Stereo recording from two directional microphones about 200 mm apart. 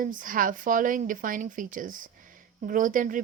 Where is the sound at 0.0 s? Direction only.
40° right (ahead or behind).